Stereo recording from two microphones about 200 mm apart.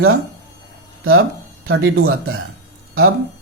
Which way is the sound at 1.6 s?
90° right.